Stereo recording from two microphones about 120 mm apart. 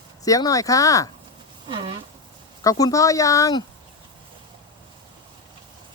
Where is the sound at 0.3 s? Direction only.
30° left (ahead or behind).